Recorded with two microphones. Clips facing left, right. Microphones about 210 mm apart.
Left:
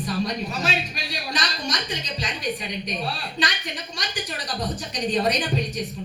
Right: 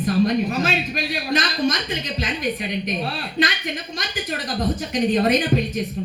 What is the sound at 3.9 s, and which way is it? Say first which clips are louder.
A woman's voice: right 4 dB; 50° right (ahead or behind).